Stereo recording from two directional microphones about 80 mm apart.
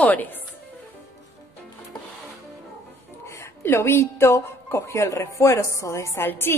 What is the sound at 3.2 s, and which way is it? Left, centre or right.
A woman's voice, left.